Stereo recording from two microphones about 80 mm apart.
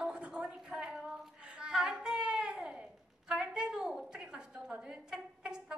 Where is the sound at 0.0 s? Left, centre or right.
Centre.